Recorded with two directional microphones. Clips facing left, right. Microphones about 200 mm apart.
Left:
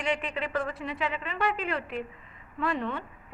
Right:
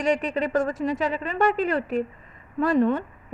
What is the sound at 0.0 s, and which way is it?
A woman's voice, 40° right (ahead or behind).